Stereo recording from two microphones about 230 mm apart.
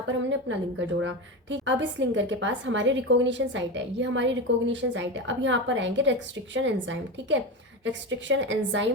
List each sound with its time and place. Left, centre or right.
0.3 s a woman's voice: right